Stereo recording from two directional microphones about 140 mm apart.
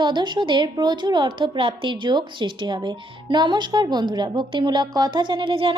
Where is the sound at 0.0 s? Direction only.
30° right (ahead or behind).